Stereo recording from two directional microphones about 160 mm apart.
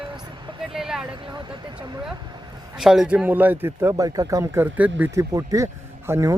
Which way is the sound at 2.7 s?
5° right (ahead or behind).